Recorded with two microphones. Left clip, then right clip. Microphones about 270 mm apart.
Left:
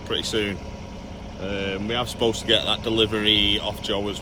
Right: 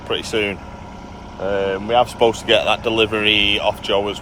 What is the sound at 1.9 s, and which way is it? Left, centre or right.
Speech, right.